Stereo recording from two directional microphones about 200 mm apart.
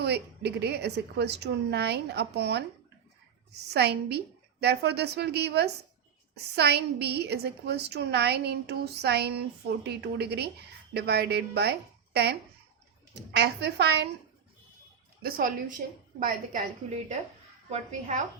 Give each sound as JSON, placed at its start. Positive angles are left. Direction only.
{"t": 0.0, "sound": "a woman's voice", "side_deg": -55}
{"t": 3.7, "sound": "a woman's voice", "side_deg": -55}
{"t": 15.2, "sound": "a woman's voice", "side_deg": -50}